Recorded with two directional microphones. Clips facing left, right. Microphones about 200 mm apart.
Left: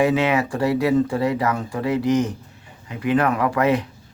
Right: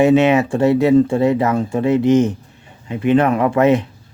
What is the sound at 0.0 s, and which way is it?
Speech, 25° right (ahead or behind).